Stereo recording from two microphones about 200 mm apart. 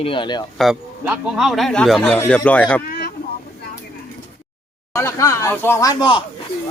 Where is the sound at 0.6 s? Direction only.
5° right (ahead or behind).